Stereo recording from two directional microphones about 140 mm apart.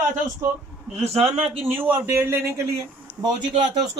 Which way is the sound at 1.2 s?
15° right (ahead or behind).